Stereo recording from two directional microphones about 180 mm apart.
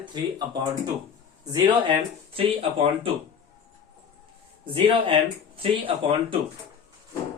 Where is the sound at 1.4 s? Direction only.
25° right (ahead or behind).